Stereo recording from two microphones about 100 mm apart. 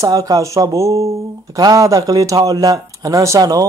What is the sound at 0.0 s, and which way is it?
Speech, 35° right (ahead or behind).